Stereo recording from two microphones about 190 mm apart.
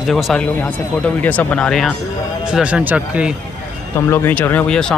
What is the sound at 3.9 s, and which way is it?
Speech, 15° left (ahead or behind).